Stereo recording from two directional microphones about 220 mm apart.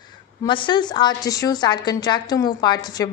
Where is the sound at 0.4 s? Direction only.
20° left (ahead or behind).